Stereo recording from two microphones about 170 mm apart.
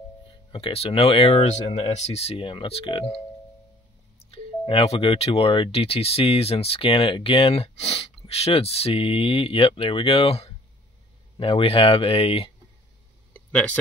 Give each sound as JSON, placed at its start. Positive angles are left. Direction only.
{"t": 0.5, "sound": "speech", "side_deg": 35}
{"t": 4.2, "sound": "speech", "side_deg": 35}
{"t": 13.3, "sound": "a sound", "side_deg": 10}